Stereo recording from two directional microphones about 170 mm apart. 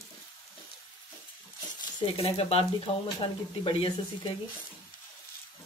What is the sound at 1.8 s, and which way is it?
Speech, 35° left (ahead or behind).